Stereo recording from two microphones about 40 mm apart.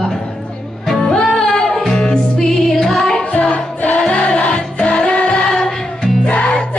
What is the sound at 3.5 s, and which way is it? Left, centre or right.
Music, left.